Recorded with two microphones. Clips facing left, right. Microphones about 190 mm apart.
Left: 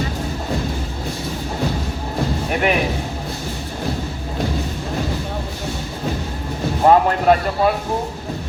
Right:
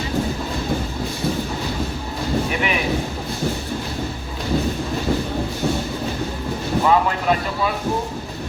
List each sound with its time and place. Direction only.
2.5 s speech: 50° left (ahead or behind)
6.8 s speech: 50° left (ahead or behind)